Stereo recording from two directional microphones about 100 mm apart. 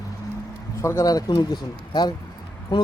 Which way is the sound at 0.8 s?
30° left (ahead or behind).